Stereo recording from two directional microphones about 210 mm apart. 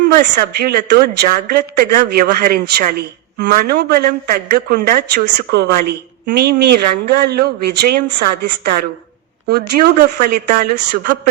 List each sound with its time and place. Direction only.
0.1 s a woman's voice: 45° right (ahead or behind)